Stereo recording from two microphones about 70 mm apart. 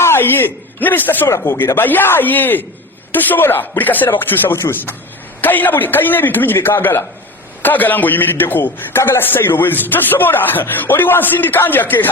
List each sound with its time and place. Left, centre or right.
0.0 s a man's voice: left